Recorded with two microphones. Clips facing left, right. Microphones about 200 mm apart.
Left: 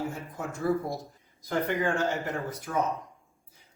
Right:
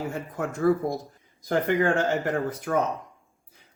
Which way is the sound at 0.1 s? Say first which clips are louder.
Right 6 dB; 70° right (ahead or behind).